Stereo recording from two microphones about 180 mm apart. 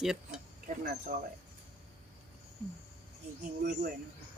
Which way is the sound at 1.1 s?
50° right (ahead or behind).